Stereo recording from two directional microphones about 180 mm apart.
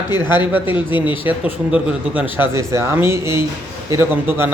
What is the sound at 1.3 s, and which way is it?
Speech, 10° right (ahead or behind).